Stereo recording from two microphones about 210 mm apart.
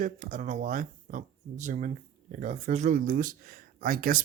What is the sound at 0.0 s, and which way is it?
Speech, 35° right (ahead or behind).